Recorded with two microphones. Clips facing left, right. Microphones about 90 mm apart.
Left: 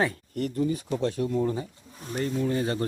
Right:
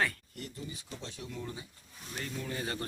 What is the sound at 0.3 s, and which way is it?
Speech, 55° left (ahead or behind).